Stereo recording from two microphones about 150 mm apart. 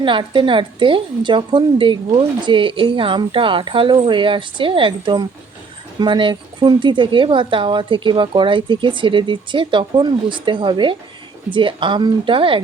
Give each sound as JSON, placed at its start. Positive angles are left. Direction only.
{"t": 0.0, "sound": "speech", "side_deg": -35}